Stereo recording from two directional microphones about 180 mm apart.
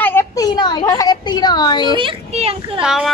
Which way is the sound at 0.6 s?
25° left (ahead or behind).